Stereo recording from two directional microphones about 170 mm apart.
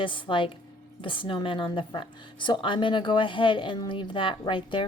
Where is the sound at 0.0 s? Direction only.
30° left (ahead or behind).